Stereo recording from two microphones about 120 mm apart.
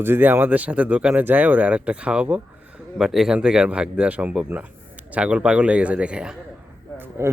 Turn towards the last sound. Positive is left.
turn(degrees=-20)  # may be behind; listen again after turning